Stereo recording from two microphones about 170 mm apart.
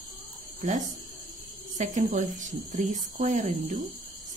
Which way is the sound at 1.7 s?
45° right (ahead or behind).